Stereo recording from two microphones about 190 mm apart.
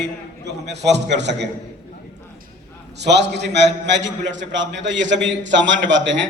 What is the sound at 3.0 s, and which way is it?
A man's voice, 65° right (ahead or behind).